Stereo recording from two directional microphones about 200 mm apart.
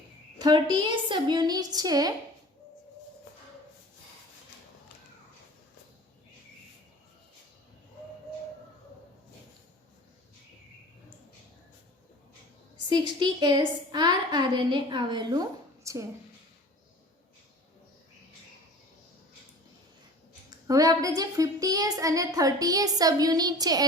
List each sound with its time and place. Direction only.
0.3 s a woman's voice: 20° right (ahead or behind)
12.9 s a woman's voice: 20° right (ahead or behind)
20.7 s a woman's voice: 15° right (ahead or behind)